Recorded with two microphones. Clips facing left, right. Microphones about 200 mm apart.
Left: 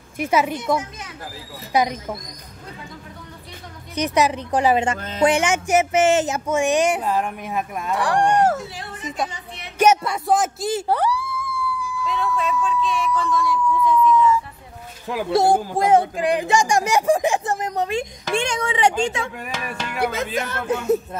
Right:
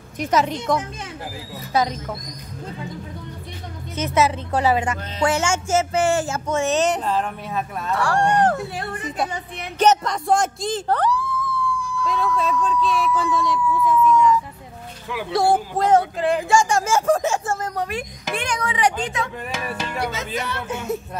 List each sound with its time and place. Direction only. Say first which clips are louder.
0.2 s speech: even; 10° left (ahead or behind)
1.7 s speech: left 1 dB; 15° left (ahead or behind)
3.9 s speech: left 1 dB; 15° left (ahead or behind)
8.7 s a woman's voice: right 4 dB; 60° right (ahead or behind)
9.8 s speech: left 1 dB; 10° left (ahead or behind)
13.6 s emergency vehicle: left 1 dB; 5° right (ahead or behind)
15.3 s speech: left 1 dB; 15° left (ahead or behind)
20.0 s music: left 6 dB; 55° left (ahead or behind)
20.3 s speech: left 3 dB; 45° left (ahead or behind)